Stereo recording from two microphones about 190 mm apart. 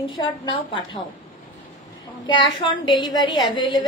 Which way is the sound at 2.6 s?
25° left (ahead or behind).